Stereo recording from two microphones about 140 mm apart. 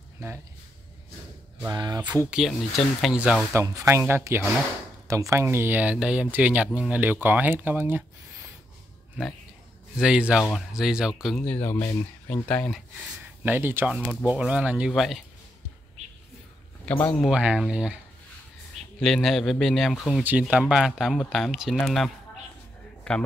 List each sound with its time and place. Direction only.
1.7 s speech: 30° right (ahead or behind)
2.0 s speech: 10° right (ahead or behind)
3.5 s speech: 20° right (ahead or behind)
9.9 s speech: 5° right (ahead or behind)
11.4 s speech: 10° left (ahead or behind)
13.4 s speech: 15° right (ahead or behind)
16.8 s speech: 10° left (ahead or behind)
17.3 s speech: 5° right (ahead or behind)